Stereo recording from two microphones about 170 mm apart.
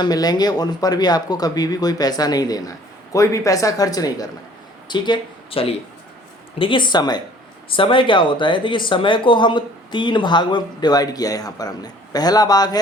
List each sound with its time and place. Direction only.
0.0 s speech: 25° left (ahead or behind)